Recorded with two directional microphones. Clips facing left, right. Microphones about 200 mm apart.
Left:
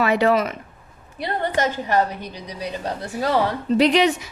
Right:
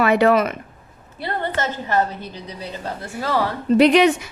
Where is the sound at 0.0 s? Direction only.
55° right (ahead or behind).